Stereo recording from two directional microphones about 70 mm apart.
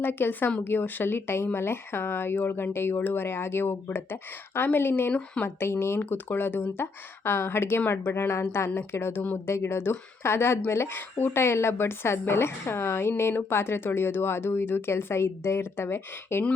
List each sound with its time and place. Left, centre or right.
0.0 s speech: left
5.1 s speech: centre
5.5 s speech: left